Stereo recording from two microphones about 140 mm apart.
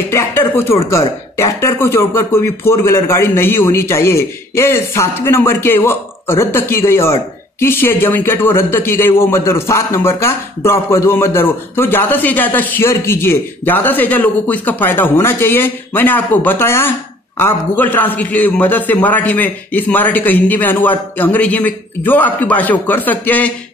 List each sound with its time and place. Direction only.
0.1 s speech: 15° left (ahead or behind)